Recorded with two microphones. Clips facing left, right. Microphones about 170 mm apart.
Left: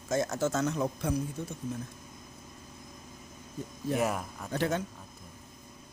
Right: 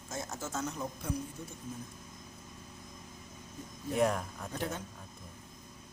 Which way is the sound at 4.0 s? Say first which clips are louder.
Right 1 dB; 5° left (ahead or behind).